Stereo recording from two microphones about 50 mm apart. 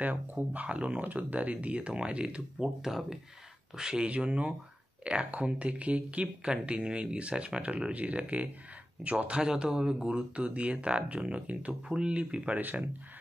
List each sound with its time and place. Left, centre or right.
0.0 s speech: right
0.5 s speech: right
2.9 s speech: centre; by 12.5 s right
12.5 s speech: right